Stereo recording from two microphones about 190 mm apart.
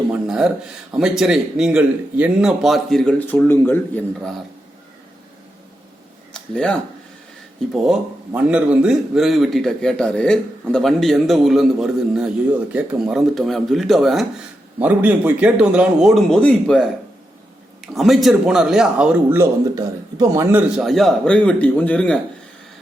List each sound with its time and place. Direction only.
0.1 s a man's voice: 5° right (ahead or behind)
6.5 s a man's voice: 5° left (ahead or behind)
17.9 s a man's voice: centre (ahead or behind)
20.8 s a man's voice: centre (ahead or behind)